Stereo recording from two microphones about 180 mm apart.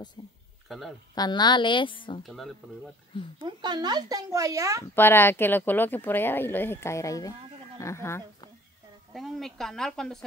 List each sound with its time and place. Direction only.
0.7 s speech: centre (ahead or behind)
1.1 s a woman's voice: 25° left (ahead or behind)
2.2 s a woman's voice: centre (ahead or behind)
3.3 s speech: 25° right (ahead or behind)
4.9 s speech: 10° left (ahead or behind)
9.1 s a woman's voice: centre (ahead or behind)